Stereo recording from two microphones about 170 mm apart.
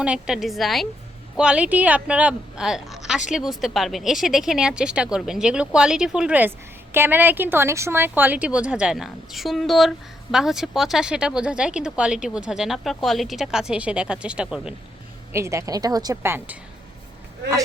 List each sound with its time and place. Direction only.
0.0 s speech: 5° right (ahead or behind)
15.3 s speech: 15° right (ahead or behind)